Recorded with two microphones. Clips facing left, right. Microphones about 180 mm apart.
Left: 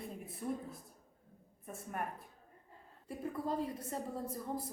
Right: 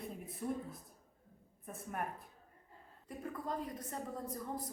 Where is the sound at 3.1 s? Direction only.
30° left (ahead or behind).